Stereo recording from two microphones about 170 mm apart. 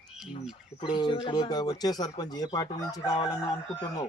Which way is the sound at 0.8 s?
25° left (ahead or behind).